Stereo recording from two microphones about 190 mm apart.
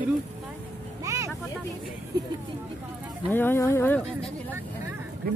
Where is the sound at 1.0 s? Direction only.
15° right (ahead or behind).